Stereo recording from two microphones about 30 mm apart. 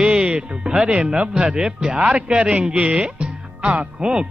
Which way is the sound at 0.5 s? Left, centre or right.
Right.